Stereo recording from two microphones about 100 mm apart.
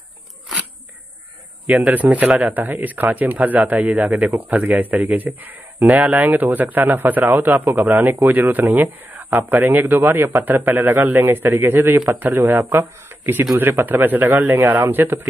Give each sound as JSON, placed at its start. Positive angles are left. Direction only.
{"t": 1.9, "sound": "speech", "side_deg": -15}